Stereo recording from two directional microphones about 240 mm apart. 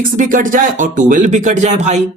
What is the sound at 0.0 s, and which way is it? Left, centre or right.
Speech, right.